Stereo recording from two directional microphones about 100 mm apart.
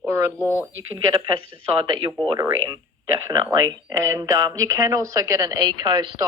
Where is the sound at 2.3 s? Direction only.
35° right (ahead or behind); by 6.3 s 50° right (ahead or behind).